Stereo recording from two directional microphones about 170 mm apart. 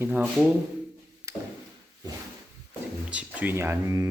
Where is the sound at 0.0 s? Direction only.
10° right (ahead or behind).